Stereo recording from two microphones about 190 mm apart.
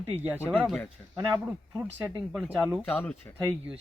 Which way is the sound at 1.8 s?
10° right (ahead or behind).